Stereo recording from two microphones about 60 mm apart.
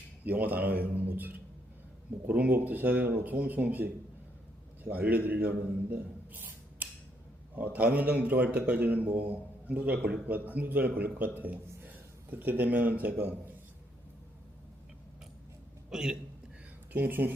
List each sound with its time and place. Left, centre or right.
0.3 s speech: right
5.9 s a sound: right
7.5 s speech: right
15.9 s a man's voice: centre
16.9 s speech: right